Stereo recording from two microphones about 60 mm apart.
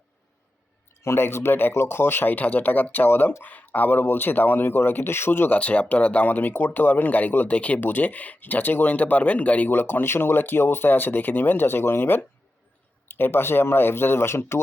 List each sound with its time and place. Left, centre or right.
1.0 s speech: left
5.5 s speech: left